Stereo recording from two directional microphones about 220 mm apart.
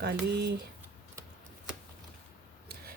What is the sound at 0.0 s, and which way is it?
Speech, 50° right (ahead or behind).